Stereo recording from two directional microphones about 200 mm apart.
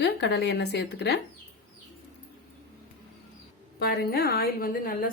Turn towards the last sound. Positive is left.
turn(degrees=45)  # may be behind; listen again after turning